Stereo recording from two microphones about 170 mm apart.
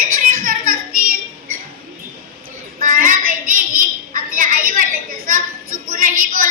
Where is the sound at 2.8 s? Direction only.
55° right (ahead or behind).